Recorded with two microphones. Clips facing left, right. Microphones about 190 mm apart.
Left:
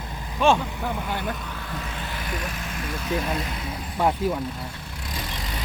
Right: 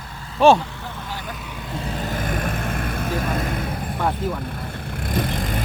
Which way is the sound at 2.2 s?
50° right (ahead or behind).